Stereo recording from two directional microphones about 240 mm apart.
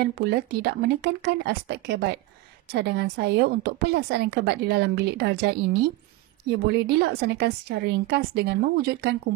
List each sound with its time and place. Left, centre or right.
0.0 s a woman's voice: right